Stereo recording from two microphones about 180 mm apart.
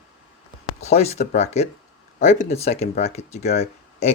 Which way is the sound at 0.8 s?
35° left (ahead or behind).